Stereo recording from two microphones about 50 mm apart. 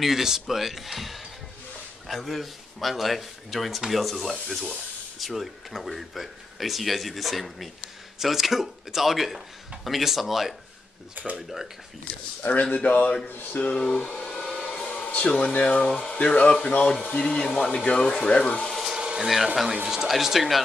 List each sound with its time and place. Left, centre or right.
0.0 s speech: centre
12.7 s a man's voice: left
14.0 s a sound: centre
15.0 s speech: left
18.7 s a sound: centre
18.9 s speech: centre